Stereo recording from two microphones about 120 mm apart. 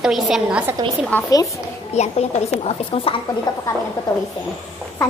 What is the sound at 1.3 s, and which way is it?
Speech, 30° left (ahead or behind).